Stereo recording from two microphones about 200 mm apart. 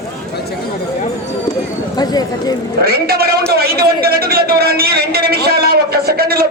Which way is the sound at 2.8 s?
50° right (ahead or behind).